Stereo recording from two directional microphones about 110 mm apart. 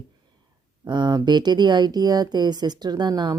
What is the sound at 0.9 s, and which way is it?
Speech, 45° right (ahead or behind).